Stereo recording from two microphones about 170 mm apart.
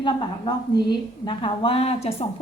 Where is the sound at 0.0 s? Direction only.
25° left (ahead or behind).